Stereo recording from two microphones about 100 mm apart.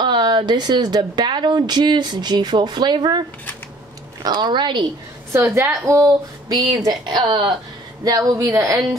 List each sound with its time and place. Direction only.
0.0 s speech: 50° right (ahead or behind)
5.3 s a woman's voice: 30° right (ahead or behind); by 7.5 s 50° right (ahead or behind)
8.0 s speech: 40° right (ahead or behind)